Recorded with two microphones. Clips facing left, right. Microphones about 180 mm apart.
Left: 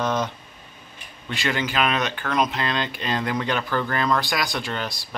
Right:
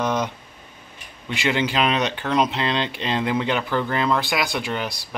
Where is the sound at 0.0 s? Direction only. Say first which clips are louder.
Right 1 dB; 15° right (ahead or behind).